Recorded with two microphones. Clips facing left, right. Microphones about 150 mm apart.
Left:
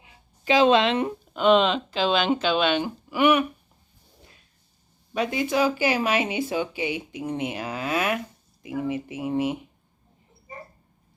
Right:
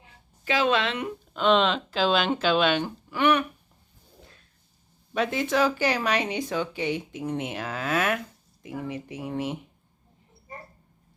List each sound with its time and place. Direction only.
0.0 s a sound: 20° left (ahead or behind)
1.3 s speech: 5° left (ahead or behind)
3.1 s speech: 10° left (ahead or behind)
5.1 s speech: centre (ahead or behind)